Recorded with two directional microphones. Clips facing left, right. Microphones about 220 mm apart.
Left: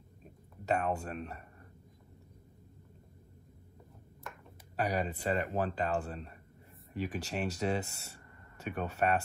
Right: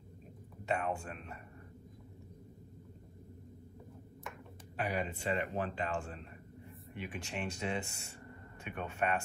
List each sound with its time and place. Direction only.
0.7 s speech: 40° left (ahead or behind)
4.7 s speech: 40° left (ahead or behind)